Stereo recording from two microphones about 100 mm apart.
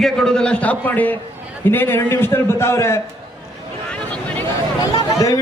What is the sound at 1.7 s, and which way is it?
A man's voice, 20° left (ahead or behind).